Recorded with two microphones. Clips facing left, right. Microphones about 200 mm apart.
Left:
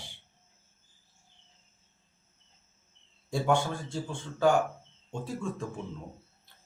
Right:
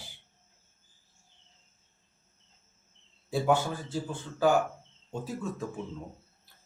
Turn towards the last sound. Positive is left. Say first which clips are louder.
# even
turn(degrees=-5)  # may be behind; listen again after turning